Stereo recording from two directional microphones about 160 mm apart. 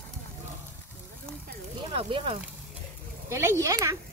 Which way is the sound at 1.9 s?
40° right (ahead or behind).